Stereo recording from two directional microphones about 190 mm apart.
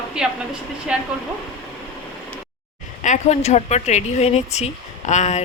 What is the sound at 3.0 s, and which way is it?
Speech, 35° left (ahead or behind).